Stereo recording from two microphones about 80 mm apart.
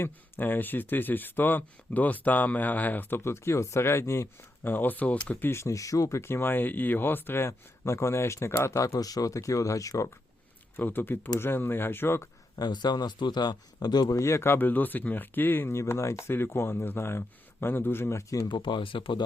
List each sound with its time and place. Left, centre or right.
0.0 s speech: left
3.2 s speech: left
4.6 s speech: left
5.5 s speech: left
10.8 s speech: left
12.5 s speech: left
14.2 s speech: left
18.4 s speech: left